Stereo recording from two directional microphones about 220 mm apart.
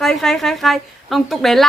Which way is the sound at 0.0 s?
Centre (ahead or behind).